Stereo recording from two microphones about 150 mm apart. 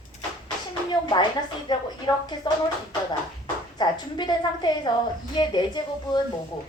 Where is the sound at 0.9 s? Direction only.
30° left (ahead or behind).